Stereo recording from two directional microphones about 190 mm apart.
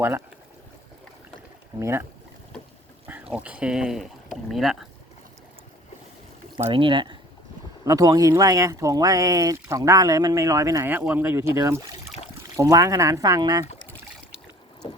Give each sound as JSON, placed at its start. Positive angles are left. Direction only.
{"t": 1.8, "sound": "speech", "side_deg": -15}
{"t": 3.1, "sound": "speech", "side_deg": -5}
{"t": 6.7, "sound": "speech", "side_deg": -25}